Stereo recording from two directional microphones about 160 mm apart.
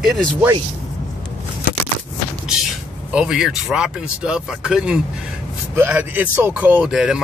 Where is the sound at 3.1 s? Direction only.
5° right (ahead or behind).